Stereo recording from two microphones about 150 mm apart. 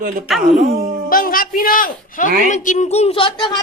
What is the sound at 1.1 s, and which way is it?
Speech, 75° left (ahead or behind).